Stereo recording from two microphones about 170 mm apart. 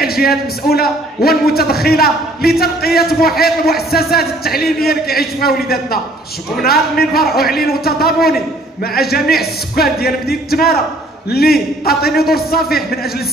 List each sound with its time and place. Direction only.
0.0 s a man's voice: 65° left (ahead or behind)